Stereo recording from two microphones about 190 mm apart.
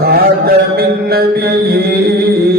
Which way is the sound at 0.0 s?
55° right (ahead or behind).